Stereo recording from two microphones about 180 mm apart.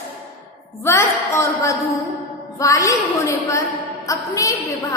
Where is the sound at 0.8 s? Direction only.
15° left (ahead or behind).